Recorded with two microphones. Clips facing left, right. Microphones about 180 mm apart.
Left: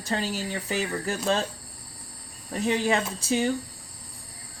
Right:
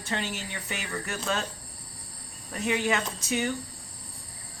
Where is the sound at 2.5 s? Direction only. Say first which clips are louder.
Left 3 dB; 30° left (ahead or behind).